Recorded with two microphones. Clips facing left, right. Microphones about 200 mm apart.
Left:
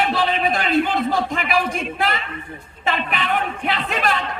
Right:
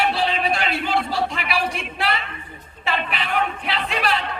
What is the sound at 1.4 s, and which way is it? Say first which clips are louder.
Speech: left 3 dB; 45° left (ahead or behind).